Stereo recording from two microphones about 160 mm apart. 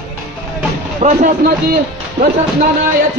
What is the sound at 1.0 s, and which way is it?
Speech, 45° right (ahead or behind).